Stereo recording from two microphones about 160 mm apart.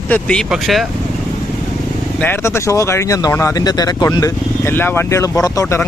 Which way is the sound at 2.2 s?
15° left (ahead or behind).